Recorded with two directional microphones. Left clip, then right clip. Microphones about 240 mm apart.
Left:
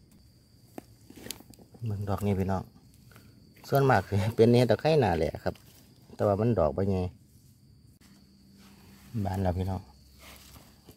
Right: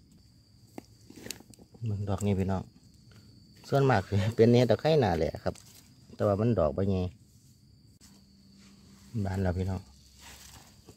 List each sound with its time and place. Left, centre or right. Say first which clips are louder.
0.7 s a sound: left 1 dB; centre
3.6 s speech: left 2 dB; centre
9.2 s speech: left 2 dB; centre